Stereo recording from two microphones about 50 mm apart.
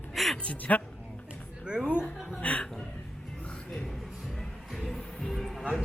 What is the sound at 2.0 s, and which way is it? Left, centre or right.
Music, left.